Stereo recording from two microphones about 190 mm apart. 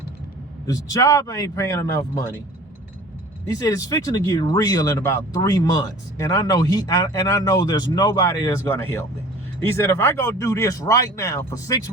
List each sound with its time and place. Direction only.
0.7 s speech: 20° left (ahead or behind)
3.6 s a man's voice: 20° left (ahead or behind)